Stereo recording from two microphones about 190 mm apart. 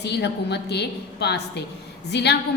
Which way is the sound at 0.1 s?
60° left (ahead or behind).